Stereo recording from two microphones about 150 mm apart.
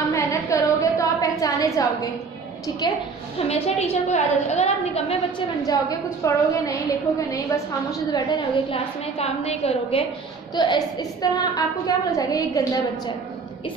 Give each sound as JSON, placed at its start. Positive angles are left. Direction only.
{"t": 0.1, "sound": "a sound", "side_deg": 20}
{"t": 2.8, "sound": "a woman's voice", "side_deg": 30}
{"t": 3.3, "sound": "a woman's voice", "side_deg": 40}
{"t": 5.6, "sound": "a woman's voice", "side_deg": 25}
{"t": 8.1, "sound": "a woman's voice", "side_deg": 30}
{"t": 9.0, "sound": "a woman's voice", "side_deg": 45}
{"t": 10.5, "sound": "a woman's voice", "side_deg": 30}